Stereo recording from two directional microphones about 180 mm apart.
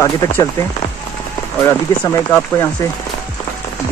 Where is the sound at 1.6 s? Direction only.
15° left (ahead or behind).